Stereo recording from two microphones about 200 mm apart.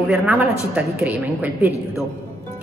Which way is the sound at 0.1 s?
5° right (ahead or behind).